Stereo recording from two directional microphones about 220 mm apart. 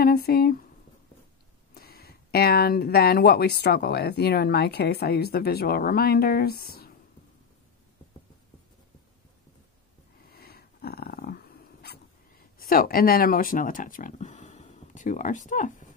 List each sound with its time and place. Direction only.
0.0 s speech: 45° left (ahead or behind)
1.7 s speech: 45° left (ahead or behind)
10.3 s dog: 45° left (ahead or behind)